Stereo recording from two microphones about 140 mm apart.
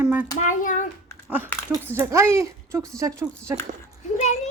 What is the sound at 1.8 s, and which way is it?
Speech, 20° right (ahead or behind).